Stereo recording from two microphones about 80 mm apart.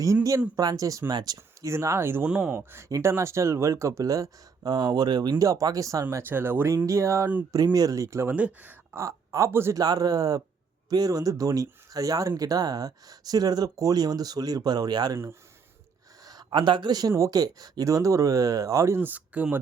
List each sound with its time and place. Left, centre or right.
0.0 s speech: right
1.6 s speech: right
2.2 s speech: centre
2.9 s speech: right
5.4 s speech: right
6.2 s speech: right
6.7 s speech: right
7.5 s speech: right
8.3 s speech: right
9.0 s speech: right
9.5 s speech: right
9.7 s speech: right
16.2 s speech: right; by 19.5 s centre